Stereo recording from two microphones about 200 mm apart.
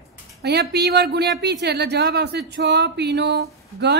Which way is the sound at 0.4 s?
55° right (ahead or behind).